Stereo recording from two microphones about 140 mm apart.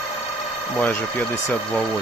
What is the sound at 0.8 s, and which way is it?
Speech, 10° left (ahead or behind).